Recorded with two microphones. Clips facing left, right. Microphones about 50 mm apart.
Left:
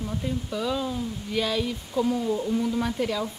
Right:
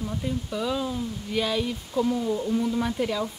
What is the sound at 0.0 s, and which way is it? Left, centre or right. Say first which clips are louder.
Speech: even; centre.